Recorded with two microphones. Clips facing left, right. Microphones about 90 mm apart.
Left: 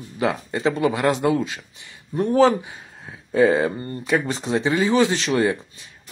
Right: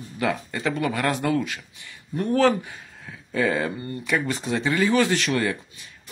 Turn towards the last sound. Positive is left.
turn(degrees=25)  # may be behind; listen again after turning